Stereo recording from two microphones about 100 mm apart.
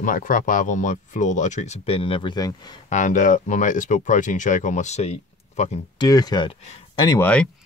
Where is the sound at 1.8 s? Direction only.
70° left (ahead or behind).